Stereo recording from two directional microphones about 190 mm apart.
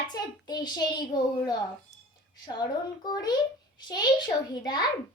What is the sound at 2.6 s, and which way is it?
Speech, 20° left (ahead or behind).